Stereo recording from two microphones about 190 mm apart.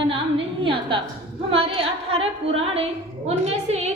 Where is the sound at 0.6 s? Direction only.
25° right (ahead or behind).